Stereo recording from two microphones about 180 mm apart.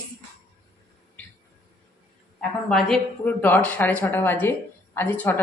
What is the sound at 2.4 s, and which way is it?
A woman's voice, 5° left (ahead or behind).